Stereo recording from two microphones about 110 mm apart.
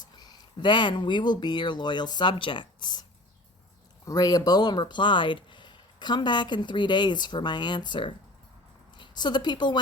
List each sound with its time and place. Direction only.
0.0 s a woman's voice: 40° left (ahead or behind)